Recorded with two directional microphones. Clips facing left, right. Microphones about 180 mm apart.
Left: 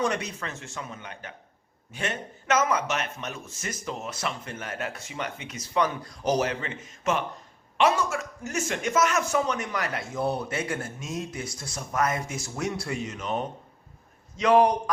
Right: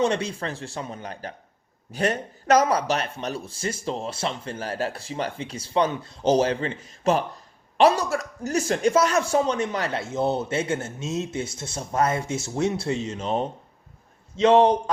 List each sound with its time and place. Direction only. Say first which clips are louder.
0.0 s speech: right 5 dB; 30° right (ahead or behind)